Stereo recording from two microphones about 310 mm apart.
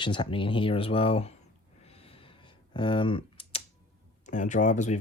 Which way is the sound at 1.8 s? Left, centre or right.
Centre.